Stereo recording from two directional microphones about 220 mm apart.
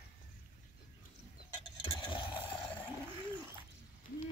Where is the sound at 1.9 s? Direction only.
20° left (ahead or behind).